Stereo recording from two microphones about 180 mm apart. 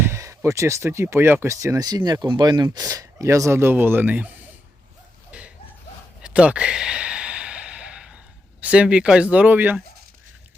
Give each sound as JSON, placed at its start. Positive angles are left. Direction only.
{"t": 0.0, "sound": "speech", "side_deg": -15}
{"t": 5.3, "sound": "chuckle", "side_deg": -5}
{"t": 6.2, "sound": "sigh", "side_deg": -5}
{"t": 8.6, "sound": "speech", "side_deg": -5}